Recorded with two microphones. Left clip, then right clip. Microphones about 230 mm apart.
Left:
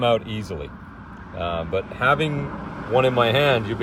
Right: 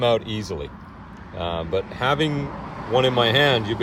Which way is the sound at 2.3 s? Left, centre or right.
Right.